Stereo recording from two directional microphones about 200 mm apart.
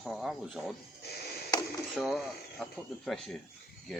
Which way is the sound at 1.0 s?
50° left (ahead or behind).